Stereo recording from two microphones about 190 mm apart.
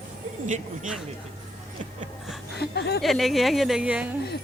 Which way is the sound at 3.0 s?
Centre (ahead or behind).